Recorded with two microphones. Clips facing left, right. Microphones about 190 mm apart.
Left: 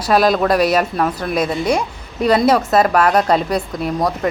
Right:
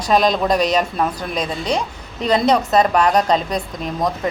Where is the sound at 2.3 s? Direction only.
20° right (ahead or behind).